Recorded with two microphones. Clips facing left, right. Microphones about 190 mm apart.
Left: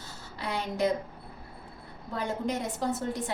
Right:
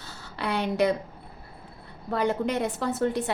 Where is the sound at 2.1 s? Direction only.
70° right (ahead or behind).